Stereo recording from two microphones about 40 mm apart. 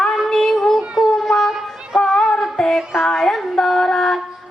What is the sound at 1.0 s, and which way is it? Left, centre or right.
Music, centre.